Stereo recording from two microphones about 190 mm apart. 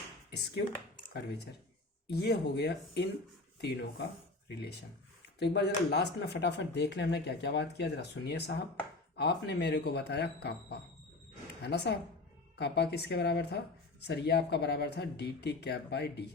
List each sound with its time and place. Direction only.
0.3 s speech: 60° left (ahead or behind)
2.0 s speech: 60° left (ahead or behind)